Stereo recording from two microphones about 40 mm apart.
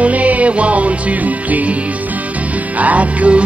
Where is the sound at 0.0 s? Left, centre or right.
Right.